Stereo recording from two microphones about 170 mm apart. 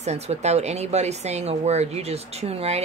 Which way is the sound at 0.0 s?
40° right (ahead or behind).